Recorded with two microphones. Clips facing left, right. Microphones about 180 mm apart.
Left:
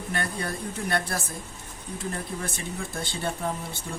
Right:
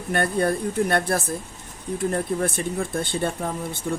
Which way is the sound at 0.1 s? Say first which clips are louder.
Right 10 dB; 55° right (ahead or behind).